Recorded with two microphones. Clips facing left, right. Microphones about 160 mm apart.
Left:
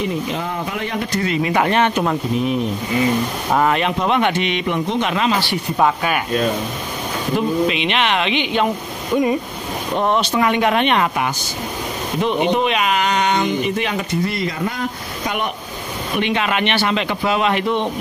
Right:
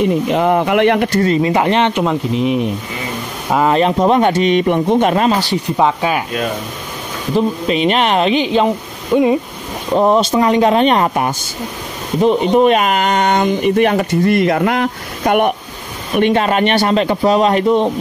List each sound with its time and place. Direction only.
0.3 s speech: 65° right (ahead or behind)
1.2 s speech: 35° right (ahead or behind); by 2.6 s 15° right (ahead or behind)
3.7 s speech: 35° right (ahead or behind)
5.8 s speech: 20° right (ahead or behind)
7.3 s speech: 40° right (ahead or behind)
9.1 s speech: 20° right (ahead or behind)
9.9 s speech: 35° right (ahead or behind); by 15.5 s 60° right (ahead or behind)
16.2 s speech: 45° right (ahead or behind)